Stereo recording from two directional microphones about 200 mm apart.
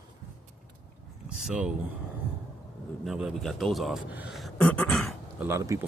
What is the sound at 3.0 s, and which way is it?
A man's voice, centre (ahead or behind).